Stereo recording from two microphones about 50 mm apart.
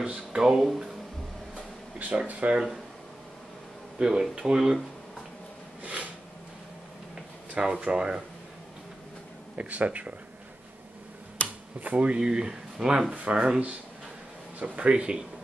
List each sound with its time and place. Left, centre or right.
0.0 s a sound: centre
0.4 s speech: centre
2.0 s speech: right
4.0 s speech: centre
7.5 s speech: right
9.6 s speech: right
11.4 s finger snapping: left
11.8 s speech: right
12.2 s speech: centre
14.6 s speech: right